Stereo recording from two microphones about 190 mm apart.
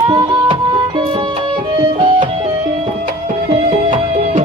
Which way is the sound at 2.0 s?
25° right (ahead or behind).